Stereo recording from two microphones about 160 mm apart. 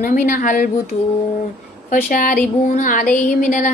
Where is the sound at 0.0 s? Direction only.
55° left (ahead or behind).